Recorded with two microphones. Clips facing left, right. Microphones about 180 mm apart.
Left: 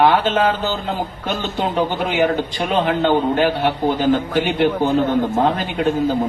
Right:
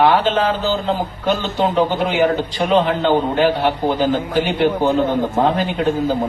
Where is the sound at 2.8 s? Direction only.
50° left (ahead or behind).